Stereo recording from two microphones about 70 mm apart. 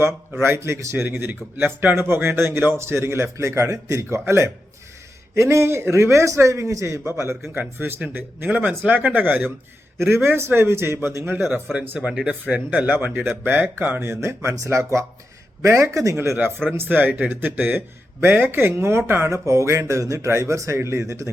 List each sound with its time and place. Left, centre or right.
0.0 s speech: right
1.0 s a man's voice: right
7.5 s speech: right
10.2 s speech: right
11.5 s speech: right
11.9 s speech: centre; by 21.2 s right